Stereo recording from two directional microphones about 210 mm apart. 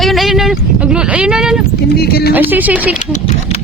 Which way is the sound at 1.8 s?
50° left (ahead or behind).